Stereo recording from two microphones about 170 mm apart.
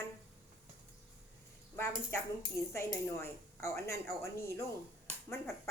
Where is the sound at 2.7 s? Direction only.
15° left (ahead or behind).